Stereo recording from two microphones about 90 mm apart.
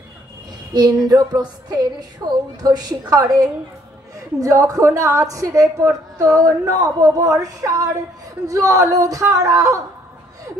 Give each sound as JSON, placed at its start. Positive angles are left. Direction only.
{"t": 1.0, "sound": "a woman's voice", "side_deg": -50}